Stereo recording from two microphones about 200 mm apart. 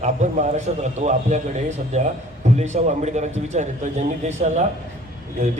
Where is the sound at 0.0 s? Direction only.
35° right (ahead or behind).